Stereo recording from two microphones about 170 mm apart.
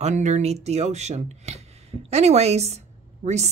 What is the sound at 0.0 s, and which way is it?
Speech, 45° right (ahead or behind).